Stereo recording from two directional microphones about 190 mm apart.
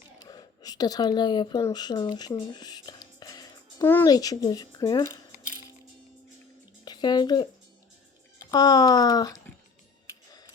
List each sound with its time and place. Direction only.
0.2 s speech: 20° left (ahead or behind)
6.8 s speech: 20° left (ahead or behind)
8.4 s speech: 20° left (ahead or behind)